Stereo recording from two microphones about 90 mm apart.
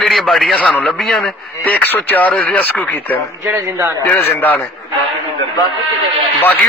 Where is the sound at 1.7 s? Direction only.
20° left (ahead or behind).